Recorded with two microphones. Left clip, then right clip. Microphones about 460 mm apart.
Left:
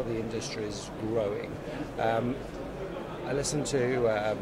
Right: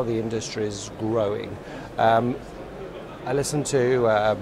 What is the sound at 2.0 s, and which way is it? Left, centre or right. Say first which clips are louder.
Speech: right 10 dB; right.